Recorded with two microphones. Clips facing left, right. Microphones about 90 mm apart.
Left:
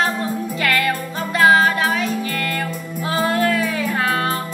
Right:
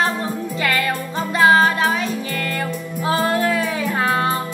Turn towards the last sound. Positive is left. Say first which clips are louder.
# right 1 dB
turn(degrees=-20)  # may be behind; listen again after turning